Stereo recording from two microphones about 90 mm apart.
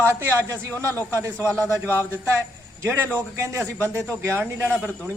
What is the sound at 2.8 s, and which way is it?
A man's voice, 25° right (ahead or behind).